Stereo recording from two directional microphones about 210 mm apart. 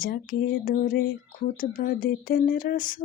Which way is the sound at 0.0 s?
40° left (ahead or behind).